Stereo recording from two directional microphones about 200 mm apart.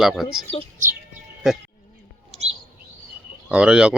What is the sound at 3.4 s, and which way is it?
Speech, 5° right (ahead or behind).